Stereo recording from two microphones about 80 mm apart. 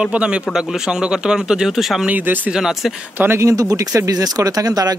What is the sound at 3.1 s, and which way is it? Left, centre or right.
Speech, right.